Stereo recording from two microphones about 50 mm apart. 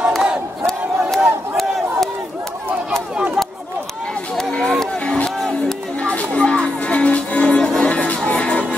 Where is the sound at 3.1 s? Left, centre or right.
Right.